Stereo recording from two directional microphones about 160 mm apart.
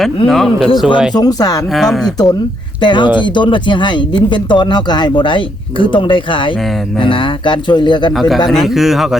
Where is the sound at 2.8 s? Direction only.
30° left (ahead or behind).